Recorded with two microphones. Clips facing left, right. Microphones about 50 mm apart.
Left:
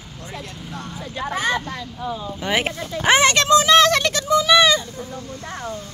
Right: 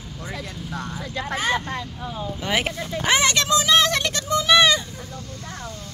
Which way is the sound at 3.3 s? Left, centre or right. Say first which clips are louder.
Left 5 dB; left.